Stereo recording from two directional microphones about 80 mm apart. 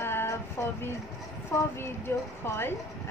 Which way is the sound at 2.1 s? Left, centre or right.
Left.